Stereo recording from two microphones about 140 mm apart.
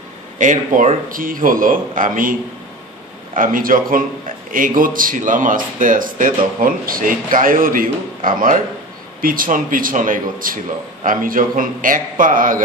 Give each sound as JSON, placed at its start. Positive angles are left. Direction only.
{"t": 0.4, "sound": "a man's voice", "side_deg": -65}
{"t": 3.3, "sound": "a man's voice", "side_deg": -75}
{"t": 9.2, "sound": "a man's voice", "side_deg": -90}